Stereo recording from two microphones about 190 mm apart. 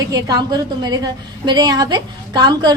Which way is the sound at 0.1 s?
20° right (ahead or behind).